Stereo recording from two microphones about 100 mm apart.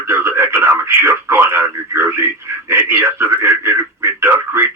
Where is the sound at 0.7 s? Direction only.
25° right (ahead or behind).